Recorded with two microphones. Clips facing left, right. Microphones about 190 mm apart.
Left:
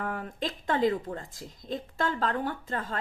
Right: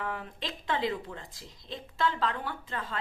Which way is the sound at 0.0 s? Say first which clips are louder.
Left 4 dB; 45° left (ahead or behind).